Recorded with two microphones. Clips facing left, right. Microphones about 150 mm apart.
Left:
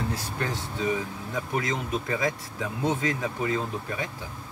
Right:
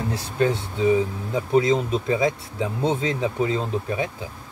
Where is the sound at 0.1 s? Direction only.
25° right (ahead or behind).